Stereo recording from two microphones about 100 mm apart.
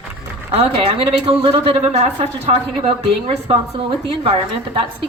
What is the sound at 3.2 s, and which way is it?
A woman's voice, 55° right (ahead or behind).